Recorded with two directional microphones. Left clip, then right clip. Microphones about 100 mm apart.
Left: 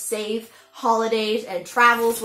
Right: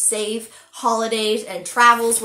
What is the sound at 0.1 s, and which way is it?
Speech, 10° right (ahead or behind).